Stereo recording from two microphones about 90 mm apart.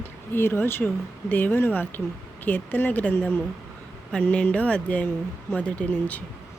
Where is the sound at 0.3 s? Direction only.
25° left (ahead or behind).